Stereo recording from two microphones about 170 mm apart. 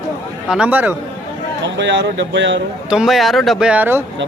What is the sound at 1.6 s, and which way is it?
Speech, 90° right.